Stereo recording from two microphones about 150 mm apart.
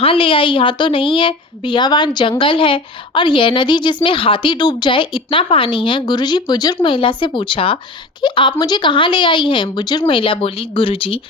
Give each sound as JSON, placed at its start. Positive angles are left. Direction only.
{"t": 0.0, "sound": "a woman's voice", "side_deg": 35}